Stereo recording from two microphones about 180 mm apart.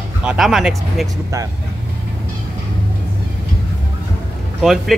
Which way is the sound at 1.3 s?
15° right (ahead or behind).